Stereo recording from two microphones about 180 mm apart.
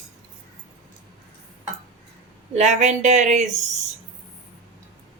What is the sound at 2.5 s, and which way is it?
Speech, 40° right (ahead or behind).